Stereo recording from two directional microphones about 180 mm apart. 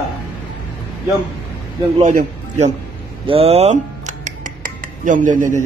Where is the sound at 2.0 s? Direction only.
45° right (ahead or behind).